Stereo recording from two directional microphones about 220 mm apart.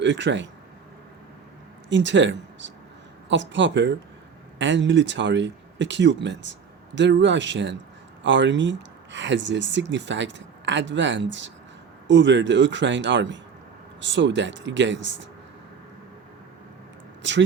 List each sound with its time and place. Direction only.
0.0 s speech: 55° right (ahead or behind)
1.9 s speech: 55° right (ahead or behind)
17.2 s speech: 55° right (ahead or behind)